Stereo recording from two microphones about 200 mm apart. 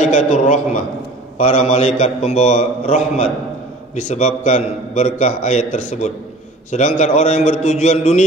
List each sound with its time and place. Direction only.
0.0 s a man's voice: 40° left (ahead or behind)